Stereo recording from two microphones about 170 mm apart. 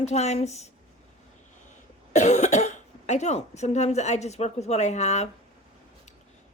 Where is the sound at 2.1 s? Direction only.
45° left (ahead or behind).